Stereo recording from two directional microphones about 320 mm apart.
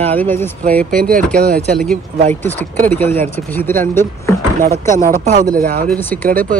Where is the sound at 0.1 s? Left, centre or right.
Centre.